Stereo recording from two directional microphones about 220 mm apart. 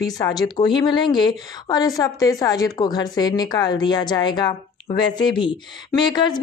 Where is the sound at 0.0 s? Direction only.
15° left (ahead or behind).